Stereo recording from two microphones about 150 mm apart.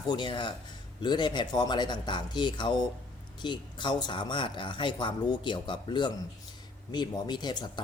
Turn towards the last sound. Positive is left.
turn(degrees=30)  # may be behind; listen again after turning